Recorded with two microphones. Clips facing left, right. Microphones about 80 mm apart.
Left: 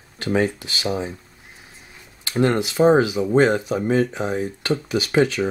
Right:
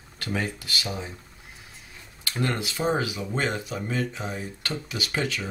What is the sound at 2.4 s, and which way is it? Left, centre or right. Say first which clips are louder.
Speech: left 10 dB; left.